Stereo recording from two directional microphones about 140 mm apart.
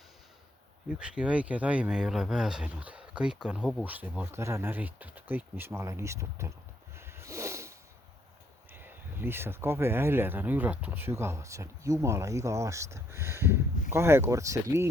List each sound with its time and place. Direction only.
0.9 s speech: 5° right (ahead or behind)
6.9 s a sound: 20° right (ahead or behind)
8.7 s speech: 15° right (ahead or behind)